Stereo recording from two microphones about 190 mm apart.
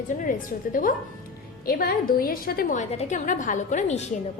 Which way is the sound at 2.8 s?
35° left (ahead or behind).